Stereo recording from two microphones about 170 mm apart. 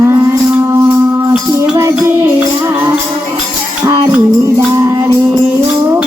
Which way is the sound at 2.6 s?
15° right (ahead or behind).